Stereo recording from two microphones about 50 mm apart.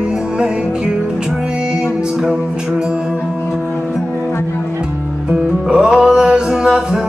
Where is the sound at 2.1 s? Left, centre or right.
Centre.